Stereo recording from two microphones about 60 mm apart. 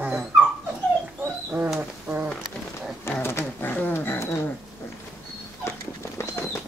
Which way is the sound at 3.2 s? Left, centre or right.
Left.